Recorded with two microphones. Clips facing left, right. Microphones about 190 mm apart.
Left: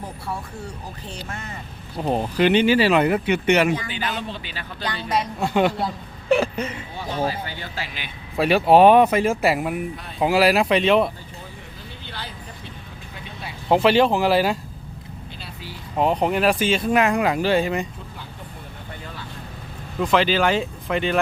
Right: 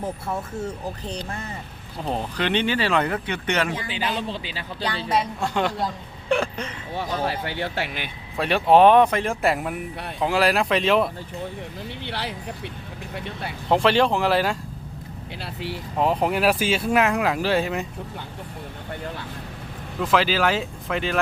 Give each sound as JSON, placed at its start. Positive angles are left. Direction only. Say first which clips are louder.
{"t": 0.6, "sound": "speech", "louder": "right 5 dB", "side_deg": -40}
{"t": 2.0, "sound": "speech", "louder": "left 6 dB", "side_deg": 10}
{"t": 5.4, "sound": "speech", "louder": "left 4 dB", "side_deg": 15}
{"t": 6.9, "sound": "speech", "louder": "right 1 dB", "side_deg": -70}
{"t": 8.4, "sound": "speech", "louder": "left 2 dB", "side_deg": 5}
{"t": 12.0, "sound": "vehicle", "louder": "right 5 dB", "side_deg": -70}
{"t": 13.1, "sound": "speech", "louder": "right 5 dB", "side_deg": -65}
{"t": 13.7, "sound": "speech", "louder": "left 2 dB", "side_deg": 5}
{"t": 15.4, "sound": "vehicle", "louder": "right 10 dB", "side_deg": -70}
{"t": 16.0, "sound": "speech", "louder": "left 2 dB", "side_deg": 0}
{"t": 20.0, "sound": "speech", "louder": "left 2 dB", "side_deg": 0}